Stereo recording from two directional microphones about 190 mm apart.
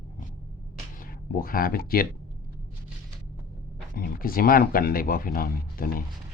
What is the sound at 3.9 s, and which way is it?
Speech, 50° left (ahead or behind).